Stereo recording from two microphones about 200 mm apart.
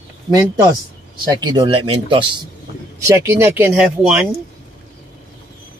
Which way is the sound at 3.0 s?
15° right (ahead or behind).